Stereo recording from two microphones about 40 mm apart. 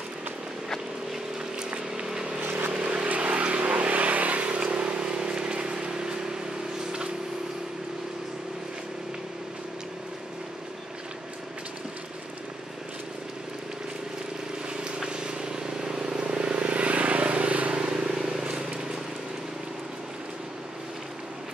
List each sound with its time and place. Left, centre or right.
1.6 s vehicle: right
2.4 s vehicle: right
2.7 s vehicle: right
3.1 s vehicle: right
14.7 s vehicle: right
18.0 s vehicle: centre